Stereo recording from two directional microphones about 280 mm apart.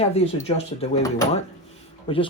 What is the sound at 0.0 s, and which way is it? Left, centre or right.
Speech, left.